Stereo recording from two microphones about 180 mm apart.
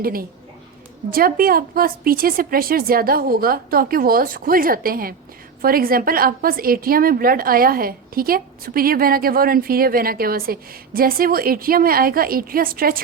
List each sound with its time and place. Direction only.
0.0 s a woman's voice: 55° right (ahead or behind)